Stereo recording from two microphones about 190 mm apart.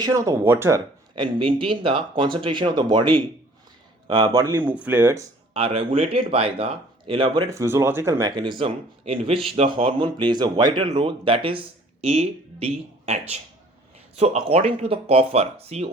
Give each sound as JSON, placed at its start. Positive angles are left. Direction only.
{"t": 0.0, "sound": "speech", "side_deg": -15}
{"t": 1.1, "sound": "speech", "side_deg": -25}
{"t": 4.6, "sound": "speech", "side_deg": -5}
{"t": 5.5, "sound": "speech", "side_deg": -25}